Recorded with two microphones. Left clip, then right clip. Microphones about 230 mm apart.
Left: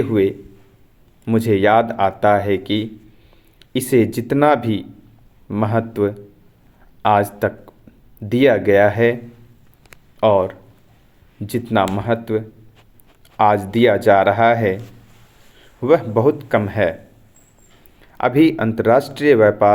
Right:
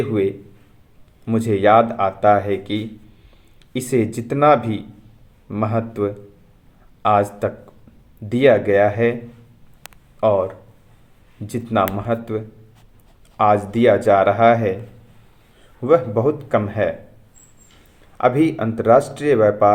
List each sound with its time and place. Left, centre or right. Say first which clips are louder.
0.1 s speech: left 3 dB; left
8.3 s speech: even; left
10.2 s speech: left 2 dB; left
15.8 s speech: left 1 dB; left
18.2 s speech: left 2 dB; left